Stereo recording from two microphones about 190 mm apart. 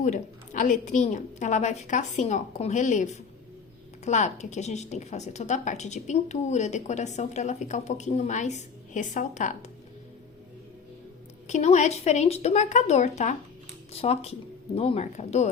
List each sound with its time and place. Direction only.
0.0 s a woman's voice: 40° left (ahead or behind)
11.4 s a woman's voice: 40° left (ahead or behind)